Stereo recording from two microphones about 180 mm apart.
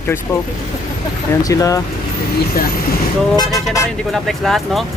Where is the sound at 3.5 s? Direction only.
Centre (ahead or behind).